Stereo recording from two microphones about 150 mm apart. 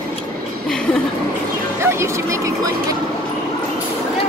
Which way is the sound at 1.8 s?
20° right (ahead or behind).